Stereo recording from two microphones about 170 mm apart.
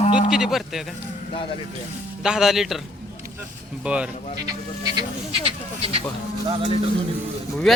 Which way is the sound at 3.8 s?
5° right (ahead or behind).